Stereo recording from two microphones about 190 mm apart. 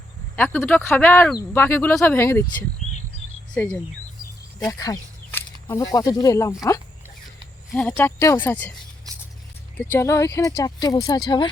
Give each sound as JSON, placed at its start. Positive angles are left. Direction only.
{"t": 0.3, "sound": "speech", "side_deg": 10}
{"t": 4.7, "sound": "a sound", "side_deg": 15}
{"t": 5.9, "sound": "speech", "side_deg": 20}
{"t": 7.7, "sound": "speech", "side_deg": 5}
{"t": 9.1, "sound": "a sound", "side_deg": -20}
{"t": 9.7, "sound": "speech", "side_deg": 10}